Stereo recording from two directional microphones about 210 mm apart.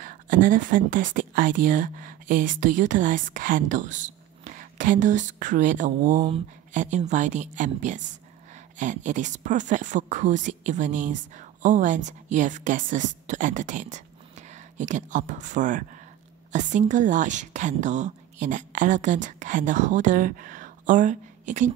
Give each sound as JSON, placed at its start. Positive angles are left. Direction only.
{"t": 0.0, "sound": "a woman's voice", "side_deg": -40}